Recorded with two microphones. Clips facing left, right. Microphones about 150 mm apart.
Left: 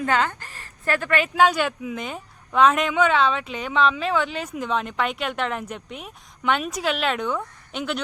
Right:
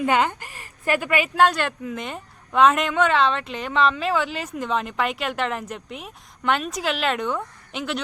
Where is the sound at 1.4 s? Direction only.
Centre (ahead or behind).